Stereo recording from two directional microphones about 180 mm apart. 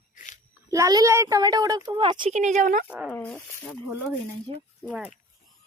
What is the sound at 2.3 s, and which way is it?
Speech, 40° right (ahead or behind).